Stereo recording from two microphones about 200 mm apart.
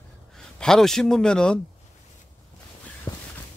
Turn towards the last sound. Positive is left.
turn(degrees=20)  # may be behind; listen again after turning